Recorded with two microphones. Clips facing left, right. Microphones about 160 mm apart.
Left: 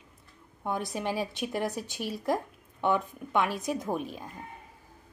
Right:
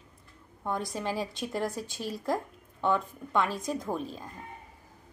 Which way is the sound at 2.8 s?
15° left (ahead or behind).